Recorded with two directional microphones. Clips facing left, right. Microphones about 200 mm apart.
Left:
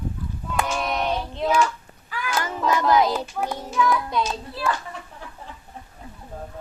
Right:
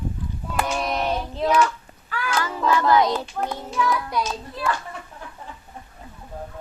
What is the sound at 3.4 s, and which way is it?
Child singing, 10° left (ahead or behind).